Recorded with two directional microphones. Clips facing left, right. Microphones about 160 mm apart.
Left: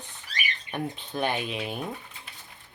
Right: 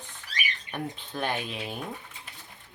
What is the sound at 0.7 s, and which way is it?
Speech, 15° left (ahead or behind).